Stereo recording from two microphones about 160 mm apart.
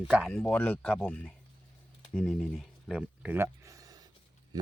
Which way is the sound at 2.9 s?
10° right (ahead or behind).